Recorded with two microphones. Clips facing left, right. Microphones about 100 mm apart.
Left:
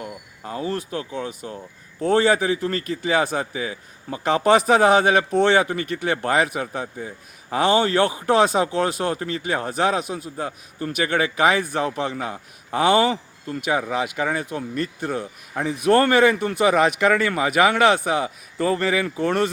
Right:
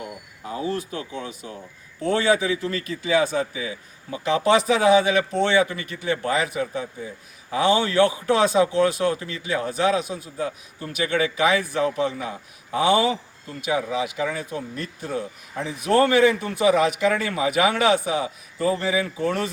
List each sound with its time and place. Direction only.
0.4 s a man's voice: 45° left (ahead or behind); by 19.4 s 65° left (ahead or behind)